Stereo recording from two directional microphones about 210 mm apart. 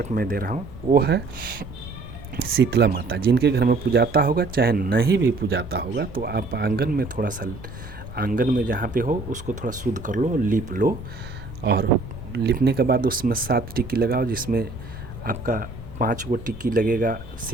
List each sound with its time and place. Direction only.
0.0 s speech: 45° right (ahead or behind)
11.6 s speech: 50° right (ahead or behind)